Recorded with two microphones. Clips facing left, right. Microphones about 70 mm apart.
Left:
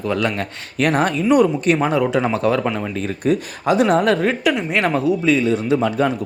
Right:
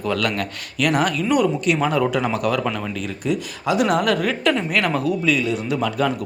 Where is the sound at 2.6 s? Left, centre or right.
Centre.